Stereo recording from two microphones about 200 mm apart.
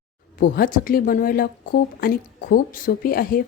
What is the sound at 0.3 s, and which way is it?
A woman's voice, 45° left (ahead or behind).